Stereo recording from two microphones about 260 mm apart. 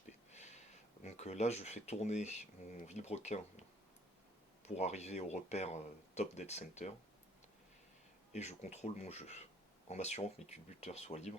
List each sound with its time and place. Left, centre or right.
0.0 s speech: left
4.6 s speech: left
8.3 s speech: left